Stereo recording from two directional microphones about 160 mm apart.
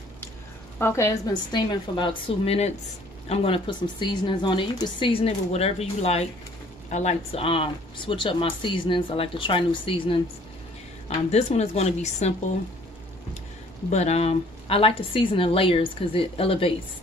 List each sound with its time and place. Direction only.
0.7 s a woman's voice: 15° left (ahead or behind); by 10.2 s 35° left (ahead or behind)
11.2 s a woman's voice: 40° left (ahead or behind)
13.8 s speech: 45° left (ahead or behind)